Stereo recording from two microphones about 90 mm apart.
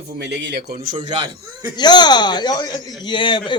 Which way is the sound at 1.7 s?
55° left (ahead or behind).